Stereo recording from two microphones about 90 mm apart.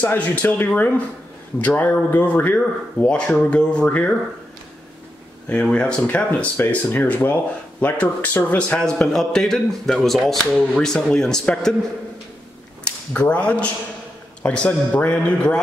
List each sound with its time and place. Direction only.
0.0 s a man's voice: 15° left (ahead or behind)
5.5 s a man's voice: 10° left (ahead or behind)
12.8 s a man's voice: 15° left (ahead or behind)